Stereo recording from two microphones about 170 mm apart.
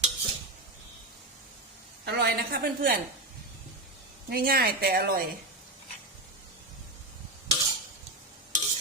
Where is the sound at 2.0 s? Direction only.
75° right (ahead or behind); by 2.9 s 60° right (ahead or behind).